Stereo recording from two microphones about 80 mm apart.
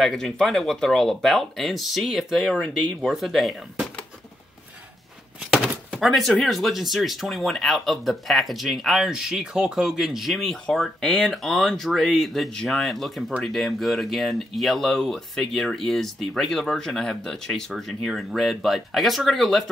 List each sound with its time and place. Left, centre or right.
0.0 s speech: centre
5.5 s speech: centre